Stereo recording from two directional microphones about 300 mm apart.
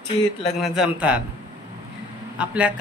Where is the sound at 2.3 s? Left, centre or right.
Centre.